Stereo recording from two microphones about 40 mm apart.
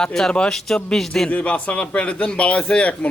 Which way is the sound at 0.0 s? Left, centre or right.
Centre.